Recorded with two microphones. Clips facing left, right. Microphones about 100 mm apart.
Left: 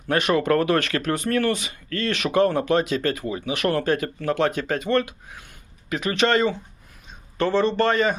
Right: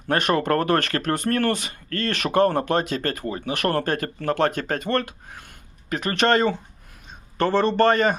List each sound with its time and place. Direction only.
0.1 s speech: 40° right (ahead or behind)